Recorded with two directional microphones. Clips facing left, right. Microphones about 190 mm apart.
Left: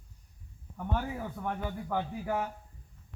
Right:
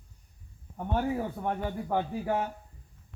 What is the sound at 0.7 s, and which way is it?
A man's voice, 35° right (ahead or behind).